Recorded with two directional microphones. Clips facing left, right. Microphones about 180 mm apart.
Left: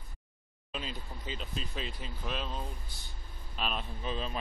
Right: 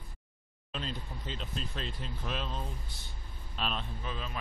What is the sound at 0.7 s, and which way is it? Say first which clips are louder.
Speech: right 1 dB; 5° left (ahead or behind).